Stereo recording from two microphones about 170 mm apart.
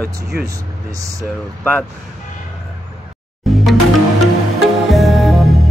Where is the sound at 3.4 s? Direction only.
Centre (ahead or behind).